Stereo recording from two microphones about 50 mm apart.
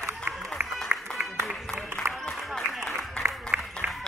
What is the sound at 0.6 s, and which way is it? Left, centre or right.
Music, centre.